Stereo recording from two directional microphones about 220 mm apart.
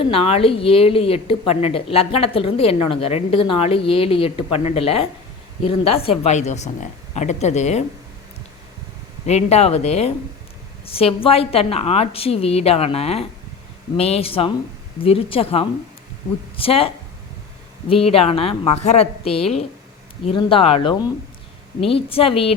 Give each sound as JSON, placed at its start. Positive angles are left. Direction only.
{"t": 0.0, "sound": "a woman's voice", "side_deg": 25}
{"t": 9.2, "sound": "a woman's voice", "side_deg": 30}